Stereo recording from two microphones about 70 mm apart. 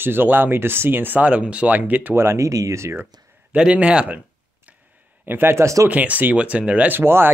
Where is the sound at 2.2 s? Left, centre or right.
Right.